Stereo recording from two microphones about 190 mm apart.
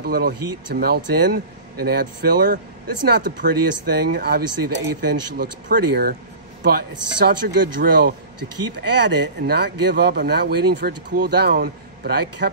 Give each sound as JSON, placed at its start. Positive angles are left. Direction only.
{"t": 0.0, "sound": "speech", "side_deg": -55}